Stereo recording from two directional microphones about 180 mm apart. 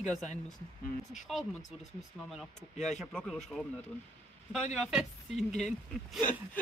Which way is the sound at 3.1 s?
Centre (ahead or behind).